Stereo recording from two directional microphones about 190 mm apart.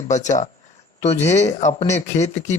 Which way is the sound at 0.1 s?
40° left (ahead or behind).